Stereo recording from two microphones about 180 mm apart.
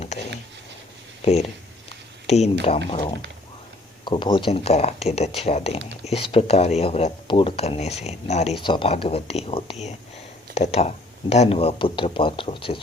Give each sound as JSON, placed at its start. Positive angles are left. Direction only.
{"t": 0.0, "sound": "a sound", "side_deg": 40}
{"t": 1.2, "sound": "speech", "side_deg": 35}
{"t": 4.0, "sound": "speech", "side_deg": 25}